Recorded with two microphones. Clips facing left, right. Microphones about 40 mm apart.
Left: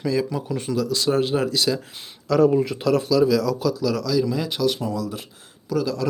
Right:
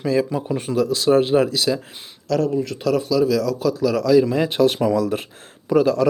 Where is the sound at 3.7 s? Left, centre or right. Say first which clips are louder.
Right 4 dB; centre.